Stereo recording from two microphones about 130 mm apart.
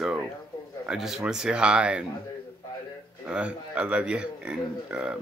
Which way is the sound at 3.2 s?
10° right (ahead or behind).